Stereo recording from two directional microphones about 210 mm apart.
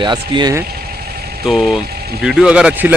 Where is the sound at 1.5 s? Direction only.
Centre (ahead or behind).